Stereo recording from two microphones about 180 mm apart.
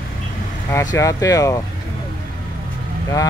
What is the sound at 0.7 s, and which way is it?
Speech, 20° left (ahead or behind).